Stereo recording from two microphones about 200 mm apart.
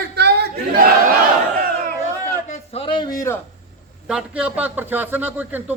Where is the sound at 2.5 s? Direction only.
30° left (ahead or behind).